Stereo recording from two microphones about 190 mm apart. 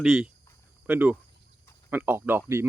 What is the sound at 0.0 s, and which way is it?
Speech, 5° right (ahead or behind).